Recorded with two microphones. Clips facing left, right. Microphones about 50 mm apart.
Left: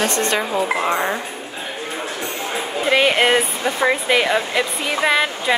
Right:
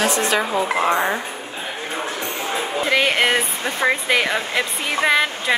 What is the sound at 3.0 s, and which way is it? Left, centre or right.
A woman's voice, centre.